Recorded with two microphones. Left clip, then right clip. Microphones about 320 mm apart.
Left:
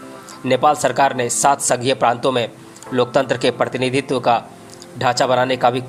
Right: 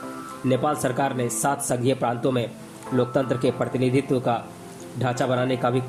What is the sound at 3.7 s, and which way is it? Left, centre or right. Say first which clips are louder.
Speech: left 4 dB; centre.